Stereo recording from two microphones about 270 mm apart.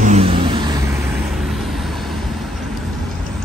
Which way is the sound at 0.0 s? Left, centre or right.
Right.